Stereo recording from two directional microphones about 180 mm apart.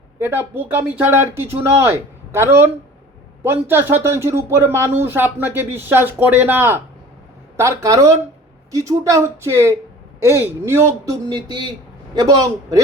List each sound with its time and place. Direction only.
0.2 s a man's voice: 15° right (ahead or behind)